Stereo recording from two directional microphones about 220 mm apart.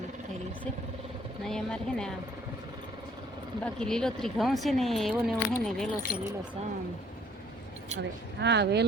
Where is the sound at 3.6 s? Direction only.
5° left (ahead or behind).